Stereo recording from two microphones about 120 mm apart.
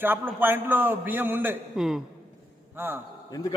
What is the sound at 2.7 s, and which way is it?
Speech, 15° right (ahead or behind).